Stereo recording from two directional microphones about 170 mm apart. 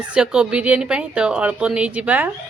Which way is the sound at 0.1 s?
5° right (ahead or behind).